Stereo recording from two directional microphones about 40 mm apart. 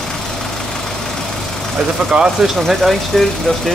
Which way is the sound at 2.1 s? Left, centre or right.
Right.